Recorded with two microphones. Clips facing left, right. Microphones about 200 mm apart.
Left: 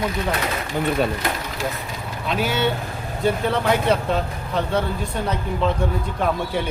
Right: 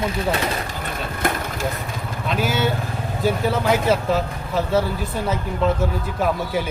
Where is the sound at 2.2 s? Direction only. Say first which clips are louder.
Even; centre (ahead or behind).